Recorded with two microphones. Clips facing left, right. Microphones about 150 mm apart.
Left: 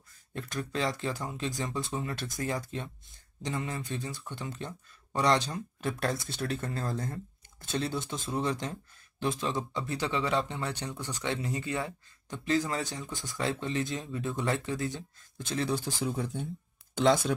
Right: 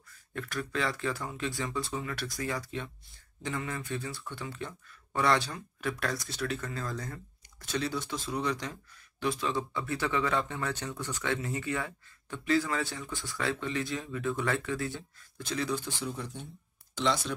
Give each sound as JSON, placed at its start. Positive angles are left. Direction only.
{"t": 0.3, "sound": "speech", "side_deg": 25}
{"t": 2.7, "sound": "speech", "side_deg": 30}
{"t": 3.4, "sound": "speech", "side_deg": 20}
{"t": 4.5, "sound": "speech", "side_deg": 35}
{"t": 5.2, "sound": "speech", "side_deg": 20}
{"t": 11.2, "sound": "speech", "side_deg": 25}
{"t": 16.1, "sound": "speech", "side_deg": 50}